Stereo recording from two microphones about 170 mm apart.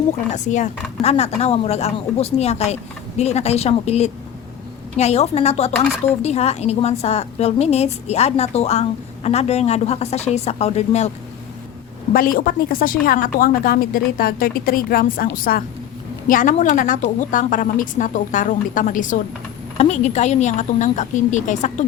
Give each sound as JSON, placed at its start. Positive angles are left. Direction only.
{"t": 0.3, "sound": "speech", "side_deg": 45}
{"t": 12.1, "sound": "a woman's voice", "side_deg": 60}